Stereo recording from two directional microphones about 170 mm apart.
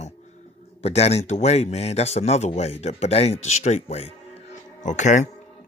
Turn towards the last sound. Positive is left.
turn(degrees=45)  # may be behind; listen again after turning